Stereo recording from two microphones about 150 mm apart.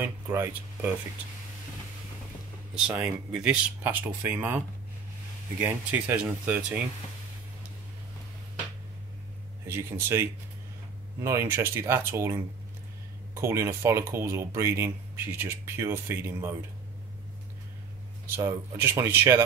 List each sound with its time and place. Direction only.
0.0 s speech: 15° right (ahead or behind)
2.9 s speech: 10° right (ahead or behind)
9.7 s speech: 15° right (ahead or behind)
18.2 s speech: 20° right (ahead or behind)